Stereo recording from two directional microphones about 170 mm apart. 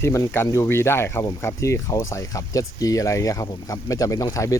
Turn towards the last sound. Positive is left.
turn(degrees=20)  # may be behind; listen again after turning